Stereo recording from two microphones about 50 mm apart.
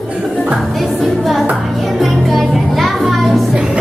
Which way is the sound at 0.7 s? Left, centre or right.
Centre.